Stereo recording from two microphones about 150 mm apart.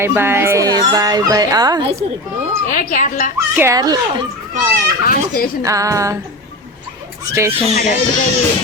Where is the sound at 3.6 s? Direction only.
20° right (ahead or behind).